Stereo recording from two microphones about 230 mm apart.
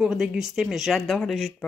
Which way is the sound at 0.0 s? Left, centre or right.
Centre.